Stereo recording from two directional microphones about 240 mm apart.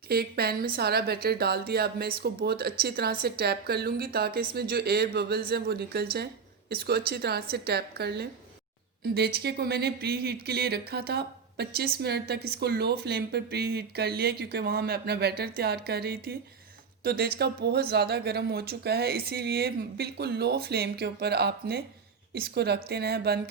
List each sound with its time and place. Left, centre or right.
0.1 s speech: right